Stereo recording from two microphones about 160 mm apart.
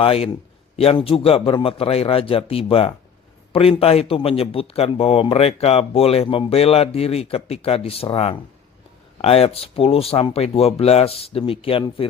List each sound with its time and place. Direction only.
0.0 s speech: 35° left (ahead or behind)